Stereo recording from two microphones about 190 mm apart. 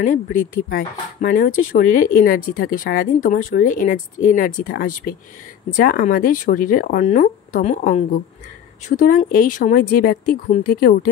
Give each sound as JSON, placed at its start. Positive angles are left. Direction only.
{"t": 0.0, "sound": "speech", "side_deg": 45}